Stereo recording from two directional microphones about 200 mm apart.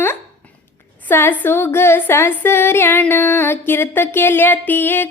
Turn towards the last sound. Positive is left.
turn(degrees=10)  # may be behind; listen again after turning